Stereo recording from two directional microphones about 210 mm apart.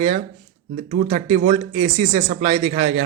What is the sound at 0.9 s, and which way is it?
Speech, 30° right (ahead or behind).